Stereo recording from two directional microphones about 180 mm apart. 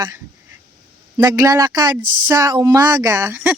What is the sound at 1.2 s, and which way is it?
A woman's voice, 20° right (ahead or behind).